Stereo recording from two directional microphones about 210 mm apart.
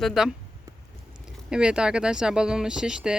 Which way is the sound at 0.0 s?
Centre (ahead or behind).